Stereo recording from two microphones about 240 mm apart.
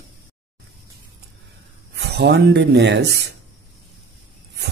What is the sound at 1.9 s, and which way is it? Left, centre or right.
Speech, right.